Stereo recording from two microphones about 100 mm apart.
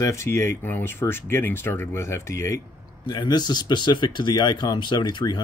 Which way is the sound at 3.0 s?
45° left (ahead or behind).